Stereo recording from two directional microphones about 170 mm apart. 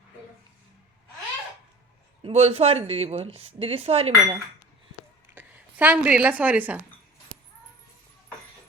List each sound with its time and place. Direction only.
2.2 s speech: 35° right (ahead or behind)
5.3 s a woman's voice: 10° right (ahead or behind)